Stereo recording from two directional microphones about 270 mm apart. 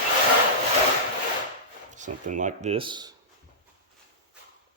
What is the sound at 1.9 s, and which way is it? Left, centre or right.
Speech, right.